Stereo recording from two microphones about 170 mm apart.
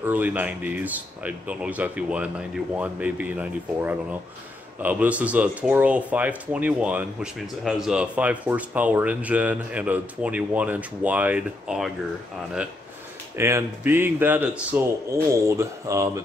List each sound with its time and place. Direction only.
0.0 s speech: 10° right (ahead or behind)
13.4 s speech: 15° right (ahead or behind)